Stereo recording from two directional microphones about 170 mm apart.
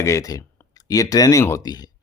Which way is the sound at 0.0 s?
20° left (ahead or behind).